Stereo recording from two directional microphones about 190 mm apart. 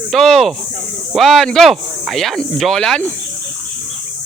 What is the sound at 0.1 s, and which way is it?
Speech, centre (ahead or behind).